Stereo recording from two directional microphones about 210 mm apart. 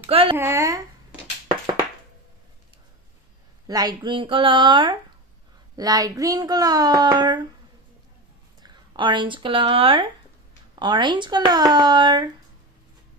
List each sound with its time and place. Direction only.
0.1 s speech: 25° right (ahead or behind)
0.4 s speech: 10° right (ahead or behind)
3.6 s speech: 20° right (ahead or behind)
8.6 s speech: 20° right (ahead or behind)